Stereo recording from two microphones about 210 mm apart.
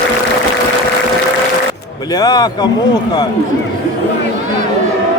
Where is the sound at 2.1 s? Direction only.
20° left (ahead or behind).